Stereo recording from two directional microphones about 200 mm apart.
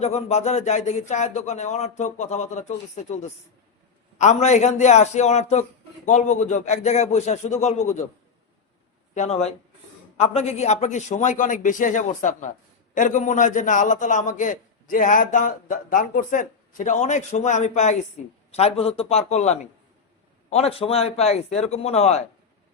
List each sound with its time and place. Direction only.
0.0 s a man's voice: 35° left (ahead or behind)
9.1 s a man's voice: 35° left (ahead or behind)